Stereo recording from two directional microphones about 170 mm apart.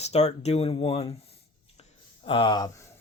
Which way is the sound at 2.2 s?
30° left (ahead or behind).